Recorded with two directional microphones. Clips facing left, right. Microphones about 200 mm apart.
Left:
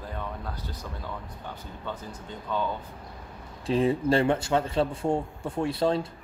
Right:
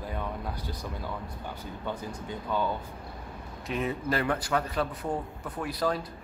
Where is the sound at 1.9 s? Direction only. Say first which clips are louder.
Right 2 dB; 10° right (ahead or behind).